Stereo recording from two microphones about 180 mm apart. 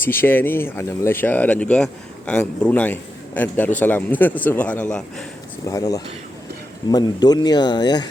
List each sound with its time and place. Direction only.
0.0 s speech: 10° left (ahead or behind)
5.6 s speech: 20° left (ahead or behind)